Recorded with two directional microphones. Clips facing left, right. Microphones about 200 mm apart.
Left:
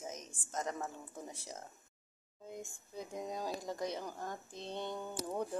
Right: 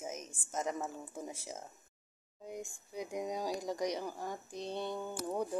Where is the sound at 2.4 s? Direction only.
15° right (ahead or behind).